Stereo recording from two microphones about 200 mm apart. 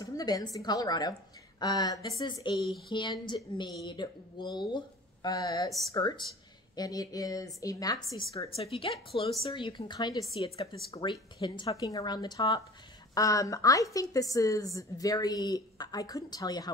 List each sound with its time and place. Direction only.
0.0 s speech: 20° left (ahead or behind)
2.5 s speech: centre (ahead or behind)
2.9 s speech: 25° left (ahead or behind)
8.5 s a woman's voice: 30° left (ahead or behind)